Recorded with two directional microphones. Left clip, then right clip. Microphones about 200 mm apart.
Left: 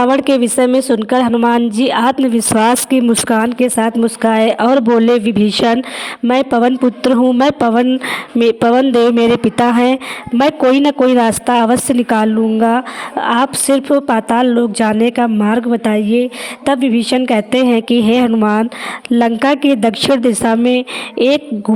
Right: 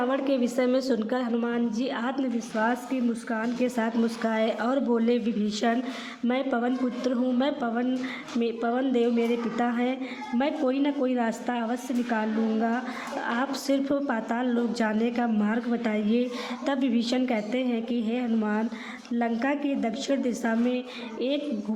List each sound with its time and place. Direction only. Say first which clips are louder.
0.0 s a man's voice: left 14 dB; 50° left (ahead or behind)